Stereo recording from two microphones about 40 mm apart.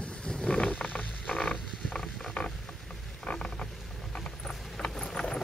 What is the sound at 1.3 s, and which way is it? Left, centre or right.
Creak, centre.